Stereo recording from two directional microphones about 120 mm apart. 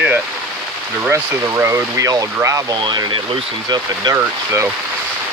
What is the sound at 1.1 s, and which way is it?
Speech, 20° right (ahead or behind).